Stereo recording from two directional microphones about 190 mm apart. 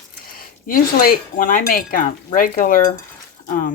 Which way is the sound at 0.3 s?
50° left (ahead or behind).